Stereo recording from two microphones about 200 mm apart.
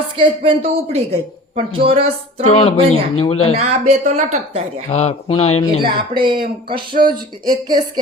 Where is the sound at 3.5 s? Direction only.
30° right (ahead or behind).